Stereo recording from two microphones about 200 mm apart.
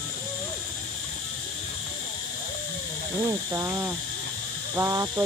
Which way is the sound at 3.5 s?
15° right (ahead or behind).